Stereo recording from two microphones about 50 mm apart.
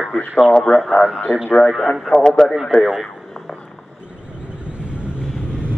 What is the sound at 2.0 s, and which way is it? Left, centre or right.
Speech, centre.